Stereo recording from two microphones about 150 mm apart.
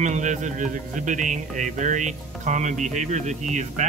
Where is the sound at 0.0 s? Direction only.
55° right (ahead or behind).